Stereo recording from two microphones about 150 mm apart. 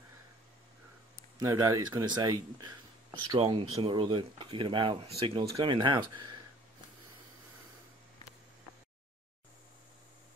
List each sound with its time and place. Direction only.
1.4 s speech: 20° right (ahead or behind)